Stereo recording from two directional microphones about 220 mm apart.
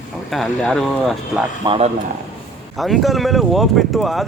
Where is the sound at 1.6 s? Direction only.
25° right (ahead or behind).